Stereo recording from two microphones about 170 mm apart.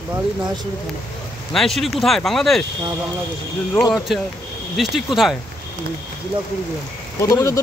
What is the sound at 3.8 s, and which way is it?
Speech, centre (ahead or behind).